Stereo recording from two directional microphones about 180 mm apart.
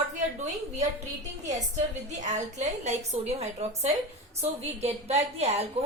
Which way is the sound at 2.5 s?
40° right (ahead or behind).